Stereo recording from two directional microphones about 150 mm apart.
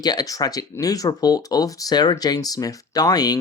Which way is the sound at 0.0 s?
25° left (ahead or behind).